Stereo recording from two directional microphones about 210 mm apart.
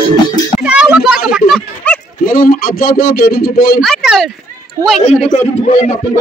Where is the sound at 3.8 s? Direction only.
Centre (ahead or behind).